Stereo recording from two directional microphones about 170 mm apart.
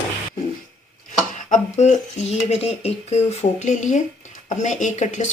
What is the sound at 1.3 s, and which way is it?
Speech, 45° left (ahead or behind).